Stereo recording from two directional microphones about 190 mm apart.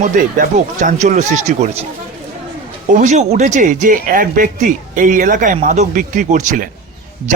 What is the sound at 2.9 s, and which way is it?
Speech, 40° right (ahead or behind).